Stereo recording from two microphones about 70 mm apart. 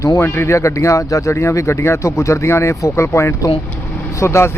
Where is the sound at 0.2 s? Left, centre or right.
Left.